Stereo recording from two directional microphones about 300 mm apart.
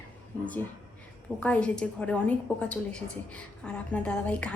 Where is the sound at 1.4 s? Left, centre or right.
Centre.